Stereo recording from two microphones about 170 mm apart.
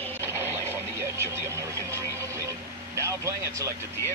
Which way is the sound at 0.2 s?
15° right (ahead or behind).